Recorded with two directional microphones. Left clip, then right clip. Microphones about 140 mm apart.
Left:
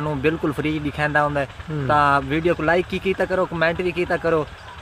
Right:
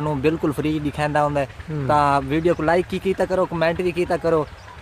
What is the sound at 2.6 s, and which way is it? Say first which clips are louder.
Speech: even; 15° right (ahead or behind).